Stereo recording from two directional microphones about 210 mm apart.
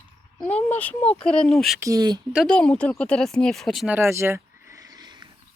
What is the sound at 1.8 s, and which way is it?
Speech, 15° right (ahead or behind).